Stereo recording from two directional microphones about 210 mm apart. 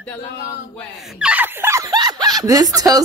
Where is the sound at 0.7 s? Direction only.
Centre (ahead or behind); by 3.0 s 15° right (ahead or behind).